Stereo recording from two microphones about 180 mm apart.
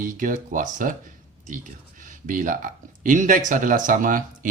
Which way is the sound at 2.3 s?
45° right (ahead or behind).